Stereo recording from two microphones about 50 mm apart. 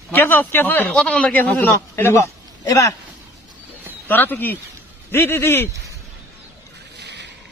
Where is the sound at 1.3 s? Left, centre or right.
Left.